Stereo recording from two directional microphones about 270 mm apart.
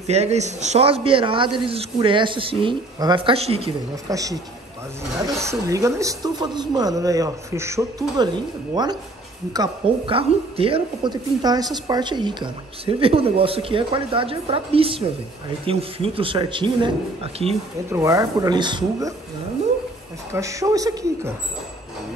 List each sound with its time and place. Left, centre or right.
0.0 s a woman's voice: right
5.4 s a woman's voice: centre
20.3 s speech: centre